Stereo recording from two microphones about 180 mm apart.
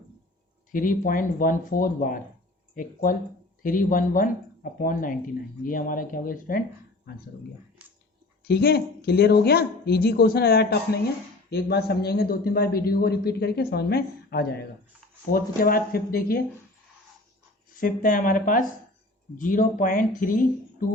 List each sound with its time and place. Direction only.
0.7 s speech: 50° left (ahead or behind)
8.4 s a man's voice: 60° left (ahead or behind)
17.7 s speech: 50° left (ahead or behind)